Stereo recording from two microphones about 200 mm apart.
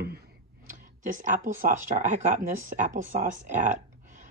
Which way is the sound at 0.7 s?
40° right (ahead or behind).